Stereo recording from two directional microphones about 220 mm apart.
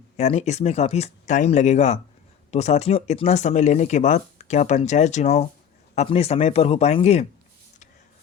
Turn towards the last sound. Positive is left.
turn(degrees=30)  # may be behind; listen again after turning